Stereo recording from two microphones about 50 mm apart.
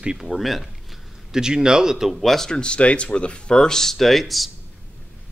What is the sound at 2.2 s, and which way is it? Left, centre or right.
Speech, centre.